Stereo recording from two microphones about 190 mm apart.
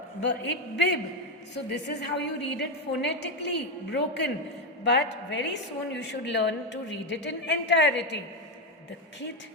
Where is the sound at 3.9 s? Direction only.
65° left (ahead or behind).